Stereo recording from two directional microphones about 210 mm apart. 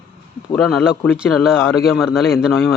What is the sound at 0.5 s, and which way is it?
Speech, centre (ahead or behind).